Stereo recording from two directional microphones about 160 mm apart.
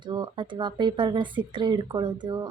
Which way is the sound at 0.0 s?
30° right (ahead or behind).